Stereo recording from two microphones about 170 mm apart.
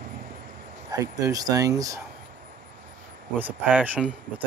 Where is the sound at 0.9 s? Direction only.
20° right (ahead or behind).